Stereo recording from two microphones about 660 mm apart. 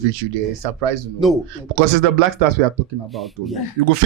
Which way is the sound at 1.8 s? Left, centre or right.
Right.